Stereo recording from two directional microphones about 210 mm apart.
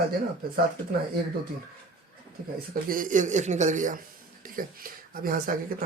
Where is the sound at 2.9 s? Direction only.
40° right (ahead or behind).